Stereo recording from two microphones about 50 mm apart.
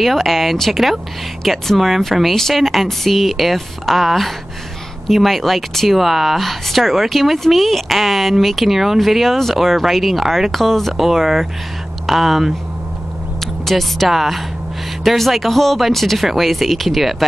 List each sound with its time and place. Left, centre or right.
0.0 s speech: centre
13.7 s speech: centre